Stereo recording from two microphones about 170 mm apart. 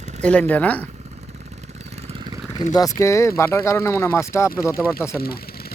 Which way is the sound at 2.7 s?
20° left (ahead or behind).